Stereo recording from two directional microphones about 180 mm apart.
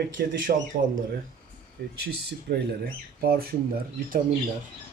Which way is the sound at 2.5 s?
55° right (ahead or behind).